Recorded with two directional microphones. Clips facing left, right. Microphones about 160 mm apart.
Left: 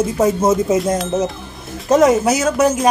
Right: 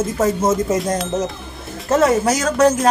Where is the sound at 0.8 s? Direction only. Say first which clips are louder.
Left 3 dB; centre (ahead or behind).